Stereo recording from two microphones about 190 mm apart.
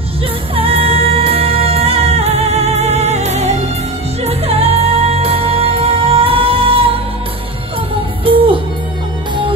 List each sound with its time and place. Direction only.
0.6 s music: 30° right (ahead or behind)
8.3 s music: 30° right (ahead or behind)